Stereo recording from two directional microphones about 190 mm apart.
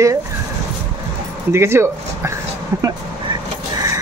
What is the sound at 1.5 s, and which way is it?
Speech, 15° right (ahead or behind).